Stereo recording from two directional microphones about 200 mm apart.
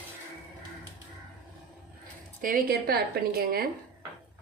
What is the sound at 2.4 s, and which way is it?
A woman's voice, 45° right (ahead or behind).